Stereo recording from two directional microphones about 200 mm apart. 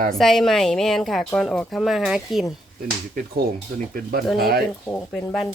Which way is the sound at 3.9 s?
45° right (ahead or behind).